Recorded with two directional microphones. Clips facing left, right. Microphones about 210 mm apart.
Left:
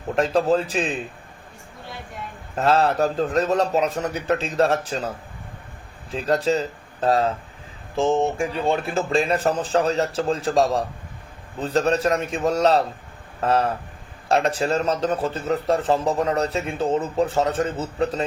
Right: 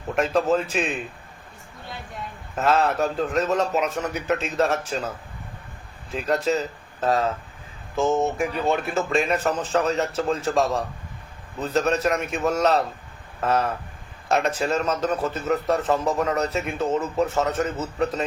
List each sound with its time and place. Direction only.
0.1 s a man's voice: 35° left (ahead or behind)
2.6 s a man's voice: 35° left (ahead or behind)
6.1 s a man's voice: 30° left (ahead or behind)